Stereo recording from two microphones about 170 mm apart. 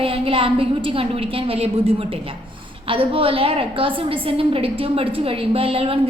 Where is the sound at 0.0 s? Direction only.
35° right (ahead or behind).